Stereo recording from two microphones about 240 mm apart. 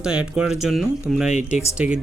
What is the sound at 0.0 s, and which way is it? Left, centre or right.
Speech, centre.